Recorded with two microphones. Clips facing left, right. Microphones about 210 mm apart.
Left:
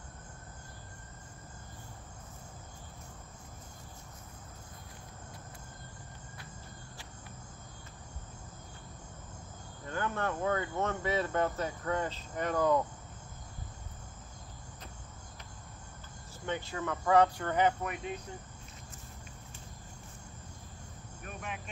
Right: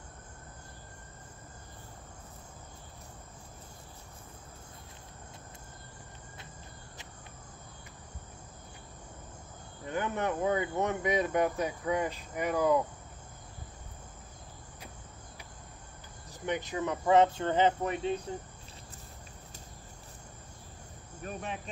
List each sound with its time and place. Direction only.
9.8 s speech: 20° right (ahead or behind)
16.3 s speech: 15° right (ahead or behind)
21.2 s speech: 30° right (ahead or behind)